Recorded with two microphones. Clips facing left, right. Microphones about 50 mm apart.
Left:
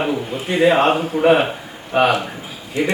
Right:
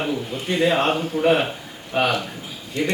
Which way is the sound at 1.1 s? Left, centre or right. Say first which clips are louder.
Left 4 dB; centre.